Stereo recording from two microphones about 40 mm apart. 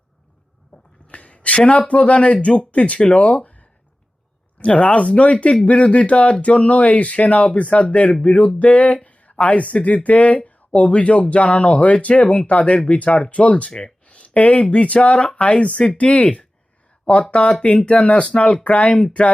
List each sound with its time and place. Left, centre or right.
0.7 s a sound: left
1.9 s speech: left
14.1 s speech: left